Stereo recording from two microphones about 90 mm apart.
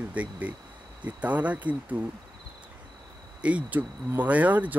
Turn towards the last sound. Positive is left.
turn(degrees=-15)  # may be behind; listen again after turning